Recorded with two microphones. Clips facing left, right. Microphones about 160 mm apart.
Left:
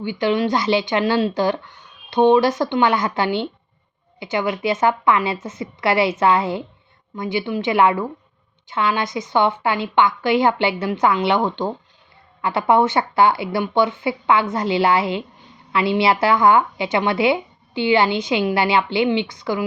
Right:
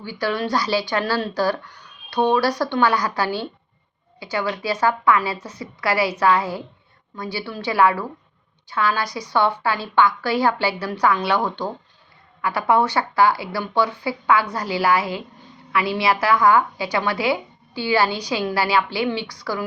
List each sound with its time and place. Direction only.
0.0 s a woman's voice: 20° left (ahead or behind)